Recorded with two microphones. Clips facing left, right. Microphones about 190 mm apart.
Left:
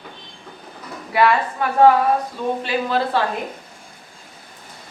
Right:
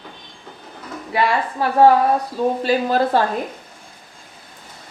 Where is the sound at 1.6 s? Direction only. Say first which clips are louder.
Right 2 dB; 30° right (ahead or behind).